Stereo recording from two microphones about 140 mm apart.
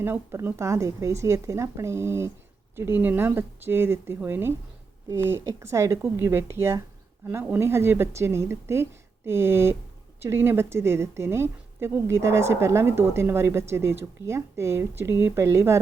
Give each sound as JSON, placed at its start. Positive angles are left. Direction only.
{"t": 0.0, "sound": "a woman's voice", "side_deg": -15}